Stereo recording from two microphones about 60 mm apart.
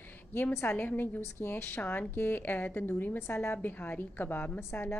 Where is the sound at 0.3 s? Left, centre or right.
Left.